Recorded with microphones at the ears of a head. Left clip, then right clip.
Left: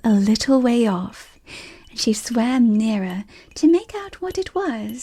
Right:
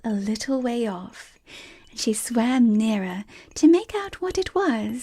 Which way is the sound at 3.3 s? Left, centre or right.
Centre.